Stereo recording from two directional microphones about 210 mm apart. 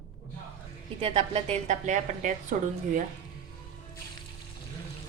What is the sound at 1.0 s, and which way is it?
A woman's voice, 30° right (ahead or behind).